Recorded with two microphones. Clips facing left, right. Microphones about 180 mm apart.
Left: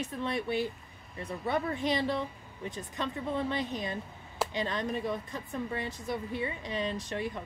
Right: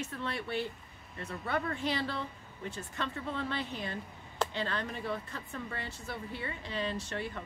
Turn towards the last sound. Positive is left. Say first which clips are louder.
# left 3 dB
turn(degrees=15)  # may be behind; listen again after turning